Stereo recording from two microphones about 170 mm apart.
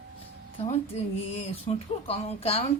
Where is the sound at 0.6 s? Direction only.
35° left (ahead or behind).